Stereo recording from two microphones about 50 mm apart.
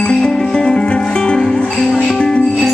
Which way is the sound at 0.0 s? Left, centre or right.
Centre.